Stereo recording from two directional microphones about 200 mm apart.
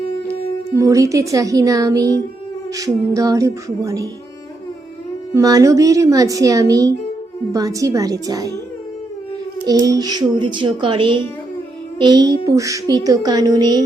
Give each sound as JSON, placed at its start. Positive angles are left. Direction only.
{"t": 0.8, "sound": "speech", "side_deg": -15}
{"t": 3.2, "sound": "speech", "side_deg": -15}
{"t": 5.3, "sound": "speech", "side_deg": -15}
{"t": 9.6, "sound": "a child's voice", "side_deg": -15}